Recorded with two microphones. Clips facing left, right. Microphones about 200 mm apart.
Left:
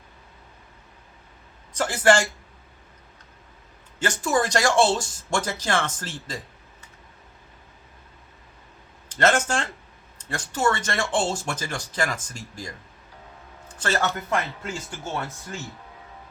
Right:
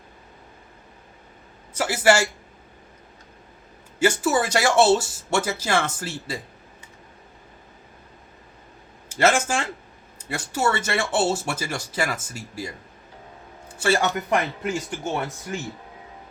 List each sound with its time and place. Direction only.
1.7 s speech: 10° right (ahead or behind)
4.0 s speech: 5° right (ahead or behind)
9.0 s speech: 10° right (ahead or behind)